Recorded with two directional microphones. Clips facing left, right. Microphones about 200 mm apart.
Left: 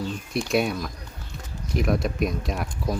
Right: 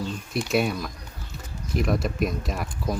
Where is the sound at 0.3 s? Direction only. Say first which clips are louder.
Even; centre (ahead or behind).